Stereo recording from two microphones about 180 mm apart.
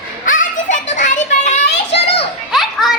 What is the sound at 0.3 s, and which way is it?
Children playing, 45° left (ahead or behind).